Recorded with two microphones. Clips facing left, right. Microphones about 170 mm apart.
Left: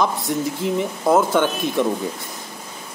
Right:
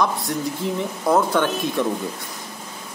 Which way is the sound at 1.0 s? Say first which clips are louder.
Left 2 dB; 5° left (ahead or behind).